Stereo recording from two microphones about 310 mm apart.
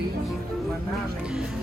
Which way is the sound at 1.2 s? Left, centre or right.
Centre.